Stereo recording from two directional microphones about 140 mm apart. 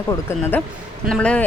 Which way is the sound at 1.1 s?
10° left (ahead or behind).